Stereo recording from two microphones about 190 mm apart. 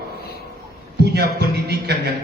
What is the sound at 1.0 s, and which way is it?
Speech, 60° right (ahead or behind).